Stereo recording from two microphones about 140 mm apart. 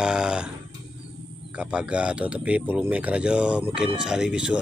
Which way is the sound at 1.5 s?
5° right (ahead or behind).